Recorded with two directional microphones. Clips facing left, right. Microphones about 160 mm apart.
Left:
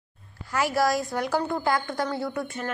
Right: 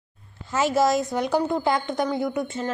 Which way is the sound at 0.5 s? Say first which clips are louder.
Right 3 dB; 20° right (ahead or behind).